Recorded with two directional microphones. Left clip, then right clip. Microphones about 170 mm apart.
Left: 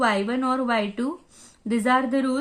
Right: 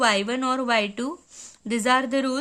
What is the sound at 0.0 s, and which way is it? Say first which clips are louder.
Speech: right 1 dB; 30° right (ahead or behind).